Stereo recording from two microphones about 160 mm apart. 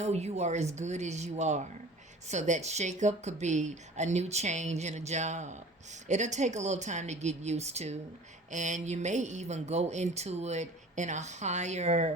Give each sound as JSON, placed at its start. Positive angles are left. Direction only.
{"t": 0.0, "sound": "speech", "side_deg": -45}